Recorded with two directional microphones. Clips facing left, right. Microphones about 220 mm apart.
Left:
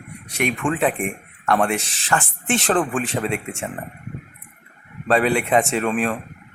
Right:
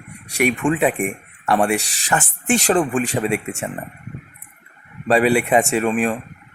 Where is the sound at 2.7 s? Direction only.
10° right (ahead or behind).